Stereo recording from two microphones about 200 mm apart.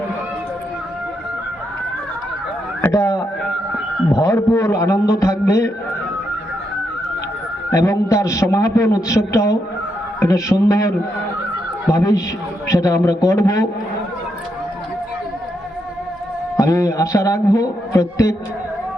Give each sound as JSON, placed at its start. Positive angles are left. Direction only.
{"t": 2.8, "sound": "a man's voice", "side_deg": 15}
{"t": 4.2, "sound": "a man's voice", "side_deg": 15}
{"t": 7.7, "sound": "a man's voice", "side_deg": 15}
{"t": 16.6, "sound": "a man's voice", "side_deg": 15}